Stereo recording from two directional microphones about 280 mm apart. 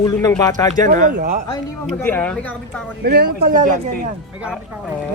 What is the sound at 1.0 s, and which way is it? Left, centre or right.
Speech, right.